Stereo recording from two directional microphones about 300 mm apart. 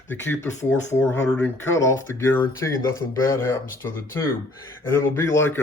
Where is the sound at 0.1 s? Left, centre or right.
Centre.